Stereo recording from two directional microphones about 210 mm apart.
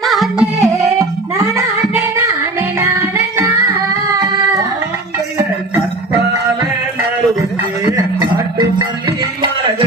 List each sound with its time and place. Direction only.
0.0 s music: centre (ahead or behind)
1.4 s music: 10° right (ahead or behind)
4.2 s a sound: 15° right (ahead or behind)